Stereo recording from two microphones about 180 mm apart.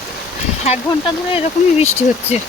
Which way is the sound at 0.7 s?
35° left (ahead or behind).